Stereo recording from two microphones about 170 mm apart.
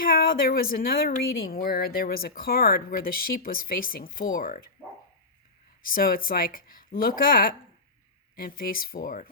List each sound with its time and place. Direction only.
0.0 s a woman's voice: 60° left (ahead or behind)
5.8 s a woman's voice: 60° left (ahead or behind)